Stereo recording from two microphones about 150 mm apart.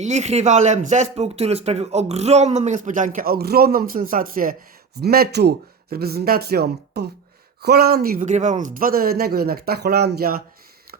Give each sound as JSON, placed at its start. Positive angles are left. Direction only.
{"t": 0.0, "sound": "speech", "side_deg": -50}
{"t": 4.9, "sound": "speech", "side_deg": -90}
{"t": 8.3, "sound": "speech", "side_deg": -50}
{"t": 8.6, "sound": "speech", "side_deg": -70}